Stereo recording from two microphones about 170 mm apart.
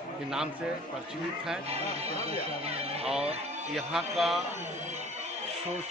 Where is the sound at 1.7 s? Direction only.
35° right (ahead or behind).